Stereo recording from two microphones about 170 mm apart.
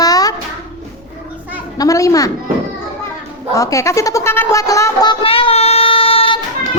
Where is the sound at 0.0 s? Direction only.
20° left (ahead or behind).